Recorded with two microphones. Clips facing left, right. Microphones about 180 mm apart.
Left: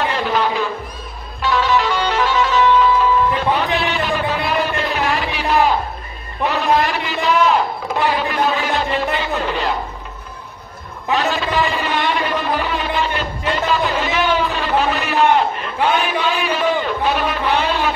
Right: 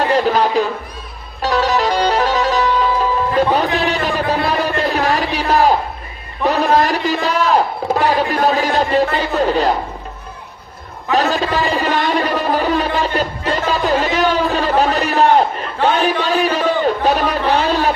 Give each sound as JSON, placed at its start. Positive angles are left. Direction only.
{"t": 0.0, "sound": "a man's voice", "side_deg": -40}
{"t": 1.4, "sound": "music", "side_deg": -40}
{"t": 3.7, "sound": "a sound", "side_deg": -40}
{"t": 11.1, "sound": "a man's voice", "side_deg": -40}